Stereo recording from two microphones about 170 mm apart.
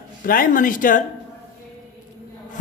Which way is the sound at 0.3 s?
55° left (ahead or behind).